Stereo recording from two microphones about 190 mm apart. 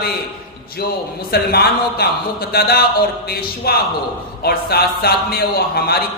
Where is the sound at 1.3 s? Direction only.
55° left (ahead or behind).